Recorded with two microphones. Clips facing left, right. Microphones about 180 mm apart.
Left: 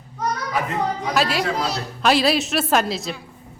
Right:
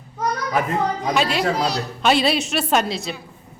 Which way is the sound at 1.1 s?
Centre (ahead or behind).